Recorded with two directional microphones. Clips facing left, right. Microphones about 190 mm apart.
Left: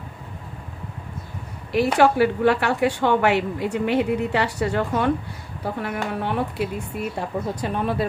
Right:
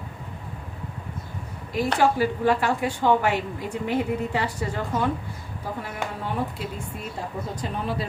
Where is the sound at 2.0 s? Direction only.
70° left (ahead or behind).